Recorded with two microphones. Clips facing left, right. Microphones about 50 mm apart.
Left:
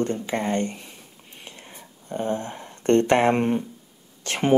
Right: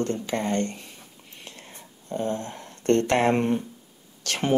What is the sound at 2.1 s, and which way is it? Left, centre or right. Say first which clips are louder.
Speech: left 1 dB; left.